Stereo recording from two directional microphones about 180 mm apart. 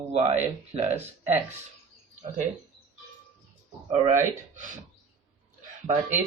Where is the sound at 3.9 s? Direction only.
45° right (ahead or behind).